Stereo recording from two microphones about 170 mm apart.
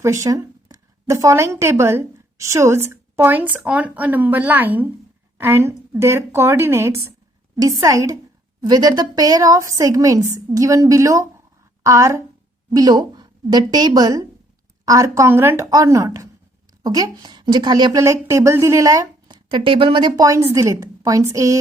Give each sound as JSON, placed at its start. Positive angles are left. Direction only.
{"t": 0.0, "sound": "a woman's voice", "side_deg": -20}